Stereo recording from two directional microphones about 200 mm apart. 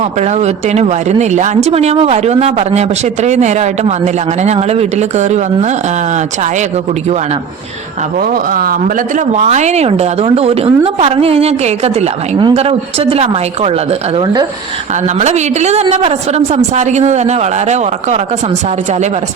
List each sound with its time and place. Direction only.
0.2 s a woman's voice: 35° right (ahead or behind)
8.3 s speech: 45° right (ahead or behind)
9.1 s a woman's voice: 35° right (ahead or behind)
15.2 s a woman's voice: 35° right (ahead or behind)